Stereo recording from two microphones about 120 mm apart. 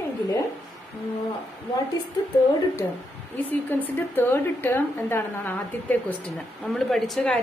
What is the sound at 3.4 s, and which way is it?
A woman's voice, 15° left (ahead or behind).